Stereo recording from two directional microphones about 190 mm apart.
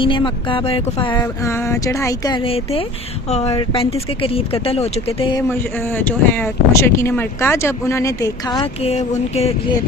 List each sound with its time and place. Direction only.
0.0 s speech: 25° left (ahead or behind)
1.2 s speech: 15° left (ahead or behind)
5.4 s speech: 10° left (ahead or behind); by 9.7 s 35° left (ahead or behind)